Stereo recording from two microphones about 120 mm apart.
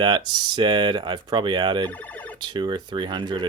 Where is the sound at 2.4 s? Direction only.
40° right (ahead or behind).